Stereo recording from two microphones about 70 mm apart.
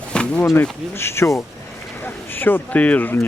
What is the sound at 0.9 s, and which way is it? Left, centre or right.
Speech, left.